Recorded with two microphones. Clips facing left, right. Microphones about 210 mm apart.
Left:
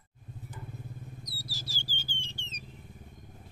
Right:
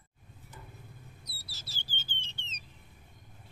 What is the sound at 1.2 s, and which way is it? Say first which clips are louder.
Rodents: left 8 dB; 10° left (ahead or behind).